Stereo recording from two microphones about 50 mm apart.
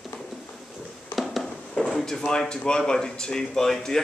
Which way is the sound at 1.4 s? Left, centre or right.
Centre.